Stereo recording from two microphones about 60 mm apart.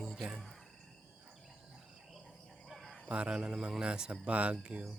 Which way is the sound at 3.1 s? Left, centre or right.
Centre.